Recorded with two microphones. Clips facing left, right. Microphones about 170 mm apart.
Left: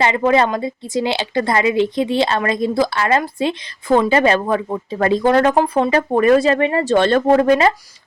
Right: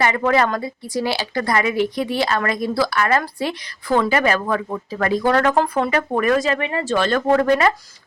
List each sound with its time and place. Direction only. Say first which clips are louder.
0.0 s speech: left 3 dB; 20° left (ahead or behind)